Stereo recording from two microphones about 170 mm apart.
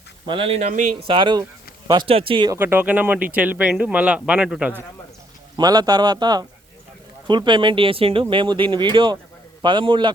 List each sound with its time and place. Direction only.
0.3 s speech: 35° right (ahead or behind)
2.6 s speech: 10° right (ahead or behind)
5.5 s speech: 25° right (ahead or behind)